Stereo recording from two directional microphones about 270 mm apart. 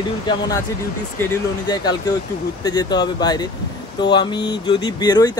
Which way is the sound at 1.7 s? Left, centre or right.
Centre.